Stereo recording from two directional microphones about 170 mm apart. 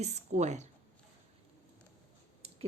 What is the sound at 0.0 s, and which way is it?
Speech, 45° right (ahead or behind).